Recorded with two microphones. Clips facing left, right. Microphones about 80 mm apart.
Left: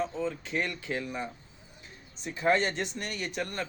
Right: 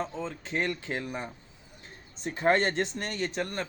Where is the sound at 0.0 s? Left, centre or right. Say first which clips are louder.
Left 2 dB; right.